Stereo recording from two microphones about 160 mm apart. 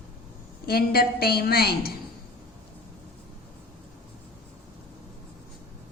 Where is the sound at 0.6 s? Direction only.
75° left (ahead or behind).